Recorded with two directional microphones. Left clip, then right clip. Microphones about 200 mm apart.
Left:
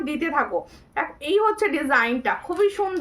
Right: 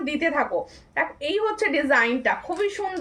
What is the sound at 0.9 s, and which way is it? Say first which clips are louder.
A woman's voice: left 2 dB; 20° left (ahead or behind).